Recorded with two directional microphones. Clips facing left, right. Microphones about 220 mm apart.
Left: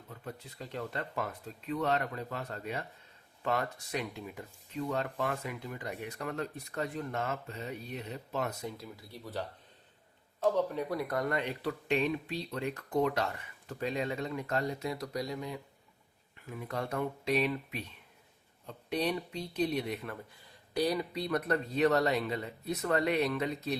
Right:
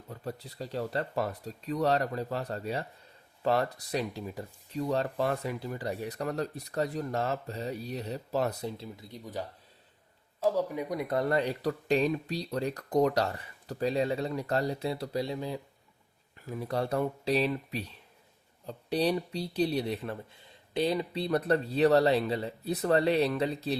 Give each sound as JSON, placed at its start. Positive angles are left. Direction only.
{"t": 0.1, "sound": "speech", "side_deg": -35}
{"t": 10.4, "sound": "speech", "side_deg": -10}